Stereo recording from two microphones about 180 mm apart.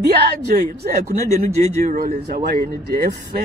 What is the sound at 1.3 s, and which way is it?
Speech, 40° right (ahead or behind).